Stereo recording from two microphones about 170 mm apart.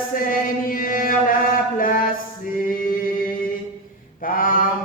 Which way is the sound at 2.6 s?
55° left (ahead or behind).